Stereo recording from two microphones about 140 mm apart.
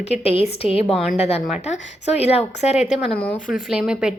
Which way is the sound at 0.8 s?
Centre (ahead or behind).